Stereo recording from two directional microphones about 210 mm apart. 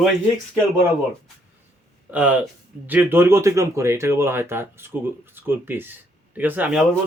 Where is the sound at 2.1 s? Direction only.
5° right (ahead or behind).